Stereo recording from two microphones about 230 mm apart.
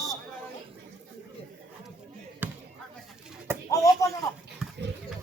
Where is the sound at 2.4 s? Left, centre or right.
Centre.